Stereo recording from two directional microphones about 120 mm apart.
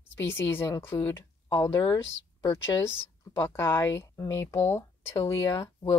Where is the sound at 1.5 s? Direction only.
40° left (ahead or behind).